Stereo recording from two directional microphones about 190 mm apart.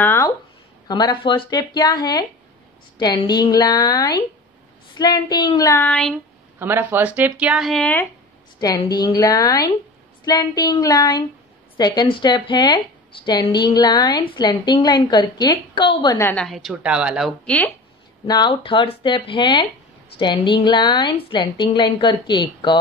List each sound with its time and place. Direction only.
0.0 s a sound: 10° left (ahead or behind)
0.8 s speech: 20° left (ahead or behind)
5.9 s speech: 5° left (ahead or behind)
6.6 s speech: 10° right (ahead or behind); by 8.1 s 10° left (ahead or behind)
8.5 s speech: 20° left (ahead or behind); by 17.3 s 5° right (ahead or behind)
18.2 s speech: 20° left (ahead or behind)